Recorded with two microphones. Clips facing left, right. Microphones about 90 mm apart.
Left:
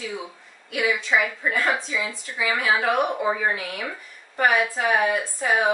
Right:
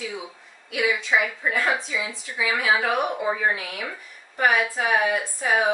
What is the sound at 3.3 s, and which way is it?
Speech, centre (ahead or behind).